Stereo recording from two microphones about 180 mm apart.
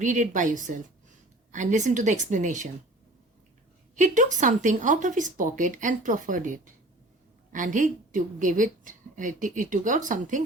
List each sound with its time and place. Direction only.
0.0 s a woman's voice: 45° right (ahead or behind)
3.9 s a woman's voice: 45° right (ahead or behind)